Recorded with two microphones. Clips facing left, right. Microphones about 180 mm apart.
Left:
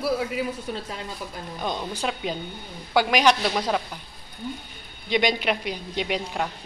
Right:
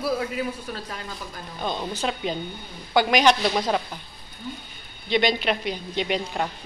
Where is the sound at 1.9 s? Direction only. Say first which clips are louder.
Right 1 dB; 10° left (ahead or behind).